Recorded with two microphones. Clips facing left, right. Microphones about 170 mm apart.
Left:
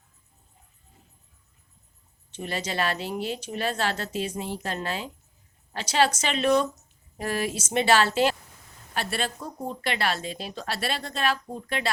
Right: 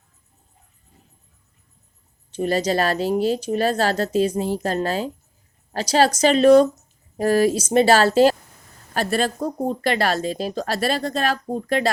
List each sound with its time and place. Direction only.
2.3 s speech: 40° right (ahead or behind)